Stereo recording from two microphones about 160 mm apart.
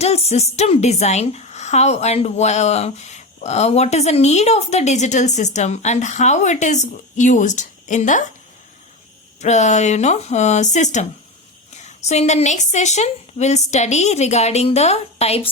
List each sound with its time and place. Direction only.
0.0 s a woman's voice: 40° left (ahead or behind)
9.4 s a woman's voice: 45° left (ahead or behind)